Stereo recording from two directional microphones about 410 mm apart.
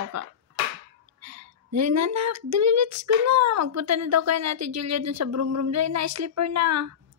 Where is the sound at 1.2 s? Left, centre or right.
Right.